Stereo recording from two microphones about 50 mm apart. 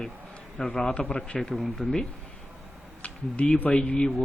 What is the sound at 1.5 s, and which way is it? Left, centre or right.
Speech, centre.